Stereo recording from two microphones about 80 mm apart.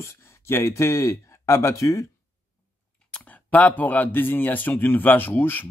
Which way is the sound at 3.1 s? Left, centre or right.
Centre.